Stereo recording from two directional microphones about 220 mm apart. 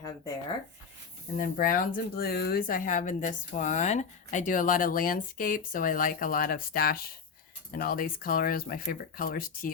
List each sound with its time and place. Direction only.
1.4 s speech: 40° left (ahead or behind)